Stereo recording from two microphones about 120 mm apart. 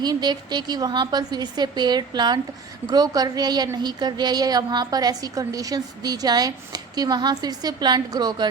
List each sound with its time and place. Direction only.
0.0 s a woman's voice: 35° right (ahead or behind)